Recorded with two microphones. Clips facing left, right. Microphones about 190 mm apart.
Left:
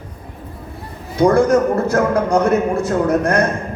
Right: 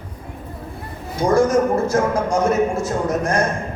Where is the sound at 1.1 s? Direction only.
60° left (ahead or behind).